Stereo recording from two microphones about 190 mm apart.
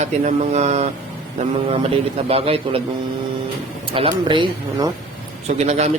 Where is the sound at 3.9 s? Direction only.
25° right (ahead or behind).